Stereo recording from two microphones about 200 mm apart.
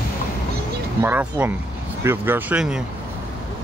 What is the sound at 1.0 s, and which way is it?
Speech, 10° right (ahead or behind).